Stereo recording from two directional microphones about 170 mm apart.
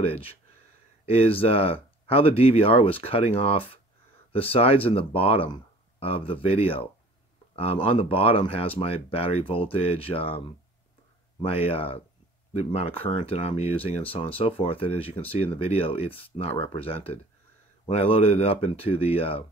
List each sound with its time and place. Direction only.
0.0 s speech: 35° left (ahead or behind)
11.5 s speech: 35° left (ahead or behind)